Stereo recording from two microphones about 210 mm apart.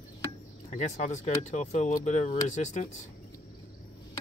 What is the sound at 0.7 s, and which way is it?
Speech, 35° left (ahead or behind).